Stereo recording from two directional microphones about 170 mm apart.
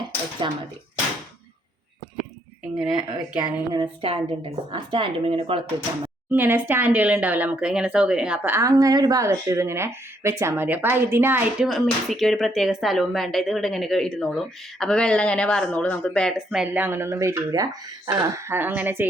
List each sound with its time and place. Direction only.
0.4 s speech: 25° right (ahead or behind)
2.7 s speech: 20° right (ahead or behind)
6.3 s speech: 15° right (ahead or behind)